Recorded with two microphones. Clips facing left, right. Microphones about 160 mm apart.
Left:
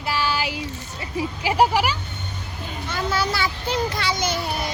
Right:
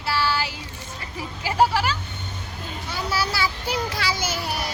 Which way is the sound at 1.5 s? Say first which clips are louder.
Left 1 dB; 15° left (ahead or behind).